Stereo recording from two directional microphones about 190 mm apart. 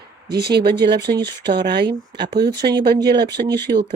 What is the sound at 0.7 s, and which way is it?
Speech, 60° right (ahead or behind).